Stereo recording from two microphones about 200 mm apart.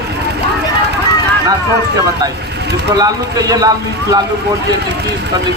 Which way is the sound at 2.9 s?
20° right (ahead or behind).